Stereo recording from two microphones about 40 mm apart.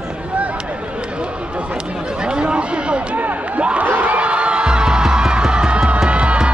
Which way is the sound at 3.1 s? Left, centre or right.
Right.